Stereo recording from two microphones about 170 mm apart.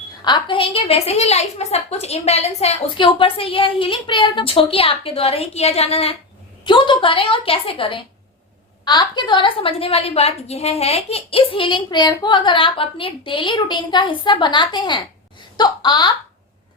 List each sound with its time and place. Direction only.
0.3 s a woman's voice: 25° left (ahead or behind)